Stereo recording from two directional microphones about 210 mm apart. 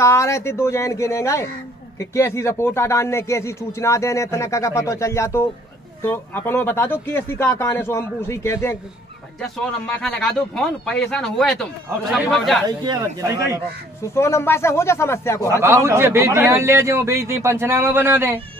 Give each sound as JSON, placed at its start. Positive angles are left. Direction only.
{"t": 0.0, "sound": "speech", "side_deg": 15}
{"t": 12.6, "sound": "speech", "side_deg": -20}
{"t": 14.1, "sound": "speech", "side_deg": 10}
{"t": 15.6, "sound": "a man's voice", "side_deg": -10}